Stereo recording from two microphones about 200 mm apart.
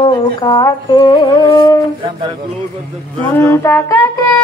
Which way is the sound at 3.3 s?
15° left (ahead or behind).